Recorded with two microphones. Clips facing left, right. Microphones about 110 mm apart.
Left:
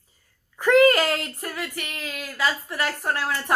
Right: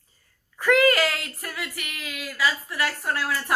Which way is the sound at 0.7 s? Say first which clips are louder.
Left 3 dB; 30° left (ahead or behind).